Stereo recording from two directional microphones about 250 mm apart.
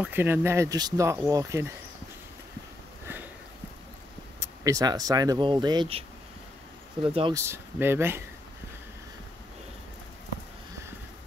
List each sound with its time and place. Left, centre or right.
0.0 s speech: centre
4.4 s speech: centre
7.1 s speech: right
7.3 s speech: centre